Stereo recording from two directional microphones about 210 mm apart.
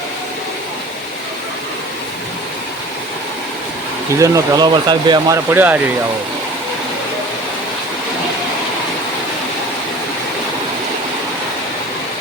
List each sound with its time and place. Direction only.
4.2 s speech: 15° right (ahead or behind)
5.5 s speech: 10° right (ahead or behind)